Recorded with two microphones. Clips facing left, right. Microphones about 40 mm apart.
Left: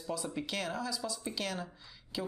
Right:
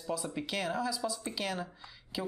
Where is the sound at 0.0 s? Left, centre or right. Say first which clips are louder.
Right 1 dB; centre.